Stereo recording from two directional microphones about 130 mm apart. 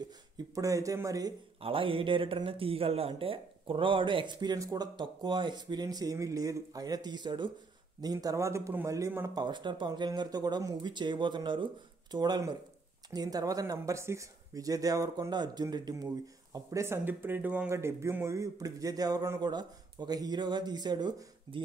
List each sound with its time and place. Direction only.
0.6 s speech: 25° right (ahead or behind)
1.6 s speech: 45° right (ahead or behind); by 9.4 s 20° right (ahead or behind)
9.4 s speech: 35° right (ahead or behind)